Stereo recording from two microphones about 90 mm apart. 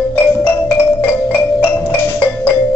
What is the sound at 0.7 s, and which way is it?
Music, 25° left (ahead or behind).